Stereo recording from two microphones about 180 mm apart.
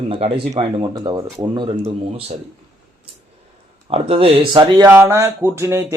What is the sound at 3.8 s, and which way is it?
Speech, 30° right (ahead or behind).